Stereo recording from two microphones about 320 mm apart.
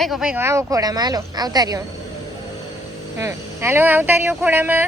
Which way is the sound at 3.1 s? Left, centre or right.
Centre.